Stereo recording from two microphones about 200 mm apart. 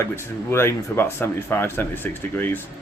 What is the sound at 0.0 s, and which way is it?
Speech, 10° left (ahead or behind).